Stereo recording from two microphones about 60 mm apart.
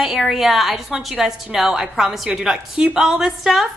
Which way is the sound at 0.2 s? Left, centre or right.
Centre.